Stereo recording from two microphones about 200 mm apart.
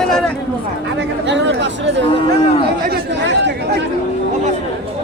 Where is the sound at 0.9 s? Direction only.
60° right (ahead or behind).